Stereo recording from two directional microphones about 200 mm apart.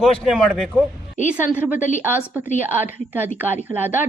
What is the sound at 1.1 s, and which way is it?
Speech, 40° left (ahead or behind).